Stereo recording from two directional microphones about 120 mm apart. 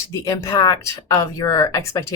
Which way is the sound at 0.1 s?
25° left (ahead or behind).